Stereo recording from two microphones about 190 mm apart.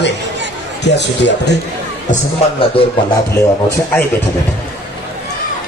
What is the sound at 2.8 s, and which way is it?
Speech, 30° left (ahead or behind).